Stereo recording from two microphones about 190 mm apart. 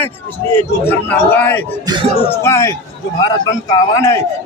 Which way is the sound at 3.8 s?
15° left (ahead or behind).